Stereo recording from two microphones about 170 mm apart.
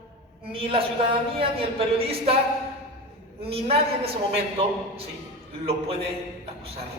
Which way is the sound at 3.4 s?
35° right (ahead or behind).